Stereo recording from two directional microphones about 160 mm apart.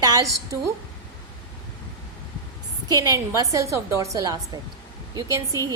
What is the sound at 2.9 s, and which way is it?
A woman's voice, 20° right (ahead or behind).